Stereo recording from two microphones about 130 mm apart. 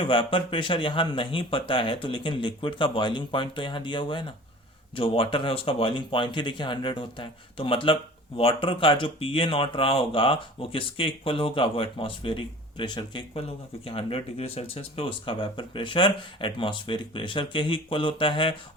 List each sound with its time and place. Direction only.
0.0 s speech: 40° left (ahead or behind)